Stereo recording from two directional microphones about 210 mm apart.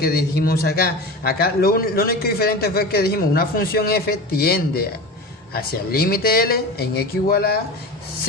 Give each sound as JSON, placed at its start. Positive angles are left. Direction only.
{"t": 0.0, "sound": "a man's voice", "side_deg": 50}